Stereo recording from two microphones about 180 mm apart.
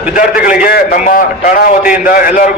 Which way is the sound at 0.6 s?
55° left (ahead or behind).